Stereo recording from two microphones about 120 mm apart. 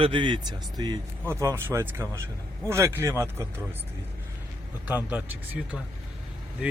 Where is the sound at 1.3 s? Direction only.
20° right (ahead or behind).